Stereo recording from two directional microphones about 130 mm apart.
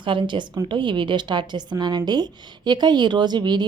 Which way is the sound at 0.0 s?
40° right (ahead or behind).